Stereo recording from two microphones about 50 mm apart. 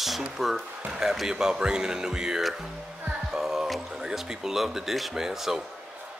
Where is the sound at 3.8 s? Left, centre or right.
Centre.